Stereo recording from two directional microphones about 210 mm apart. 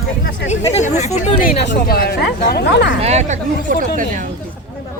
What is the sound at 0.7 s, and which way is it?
Speech, 30° left (ahead or behind).